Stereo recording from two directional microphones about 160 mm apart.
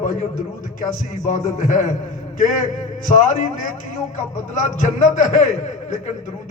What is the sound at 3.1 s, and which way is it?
Speech, 55° left (ahead or behind).